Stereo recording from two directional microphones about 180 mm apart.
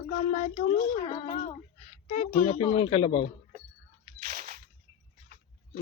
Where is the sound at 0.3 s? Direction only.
45° left (ahead or behind).